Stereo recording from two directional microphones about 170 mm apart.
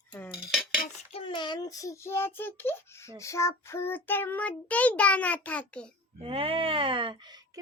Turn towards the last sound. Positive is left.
turn(degrees=-25)  # may be behind; listen again after turning